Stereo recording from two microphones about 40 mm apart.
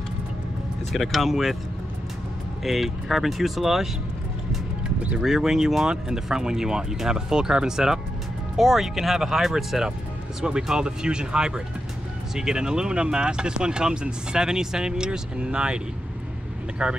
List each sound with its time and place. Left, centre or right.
0.9 s speech: centre
2.6 s speech: centre
5.2 s speech: centre
10.4 s speech: centre
16.8 s speech: right